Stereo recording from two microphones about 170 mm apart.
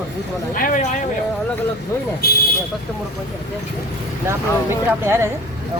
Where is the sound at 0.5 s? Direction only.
55° left (ahead or behind).